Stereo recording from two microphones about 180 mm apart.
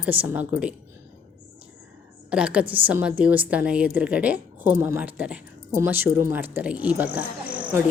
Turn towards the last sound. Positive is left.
turn(degrees=-5)  # may be behind; listen again after turning